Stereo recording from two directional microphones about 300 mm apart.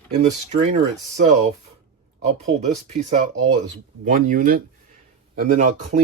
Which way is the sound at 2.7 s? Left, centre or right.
Right.